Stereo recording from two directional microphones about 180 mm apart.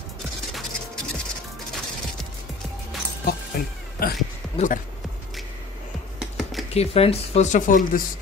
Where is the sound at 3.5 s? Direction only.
55° left (ahead or behind).